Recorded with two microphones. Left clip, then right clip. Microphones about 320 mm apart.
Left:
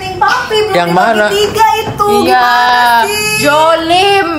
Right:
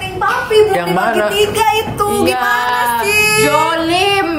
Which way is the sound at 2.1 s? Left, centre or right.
Left.